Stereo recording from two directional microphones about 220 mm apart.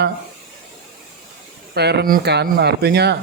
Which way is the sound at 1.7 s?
50° right (ahead or behind).